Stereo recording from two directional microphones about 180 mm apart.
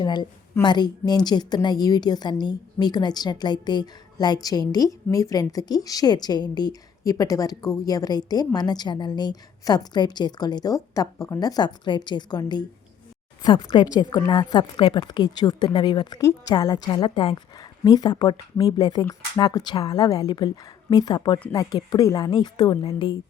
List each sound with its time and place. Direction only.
0.0 s a woman's voice: 25° left (ahead or behind)